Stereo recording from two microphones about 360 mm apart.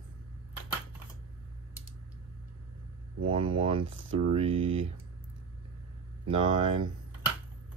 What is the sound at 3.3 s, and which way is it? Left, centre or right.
Speech, centre.